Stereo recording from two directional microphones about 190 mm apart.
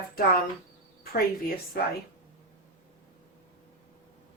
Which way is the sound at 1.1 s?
50° left (ahead or behind).